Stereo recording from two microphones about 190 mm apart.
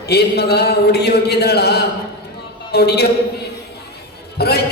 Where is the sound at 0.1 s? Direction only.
60° left (ahead or behind).